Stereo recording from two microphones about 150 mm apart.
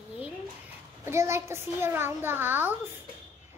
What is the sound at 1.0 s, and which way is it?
A child's voice, 20° right (ahead or behind).